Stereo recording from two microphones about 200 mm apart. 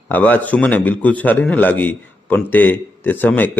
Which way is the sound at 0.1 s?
10° left (ahead or behind).